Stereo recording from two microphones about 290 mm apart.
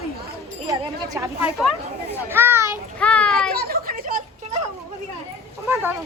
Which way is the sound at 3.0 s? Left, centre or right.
Centre.